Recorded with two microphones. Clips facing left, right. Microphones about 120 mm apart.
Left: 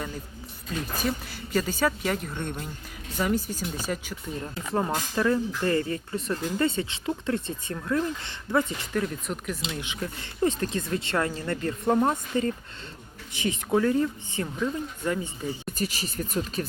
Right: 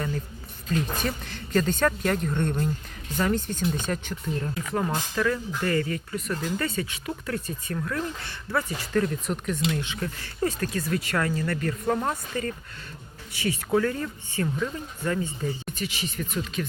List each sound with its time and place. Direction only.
0.7 s speech: 5° left (ahead or behind)
4.5 s speech: 30° left (ahead or behind)
9.0 s speech: centre (ahead or behind)
9.7 s speech: 15° left (ahead or behind)
15.6 s speech: 40° left (ahead or behind)